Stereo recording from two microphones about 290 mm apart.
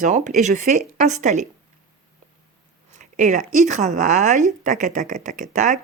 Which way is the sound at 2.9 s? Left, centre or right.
Right.